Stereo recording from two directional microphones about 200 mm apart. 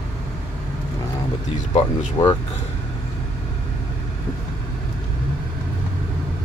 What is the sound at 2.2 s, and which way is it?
Speech, 20° left (ahead or behind).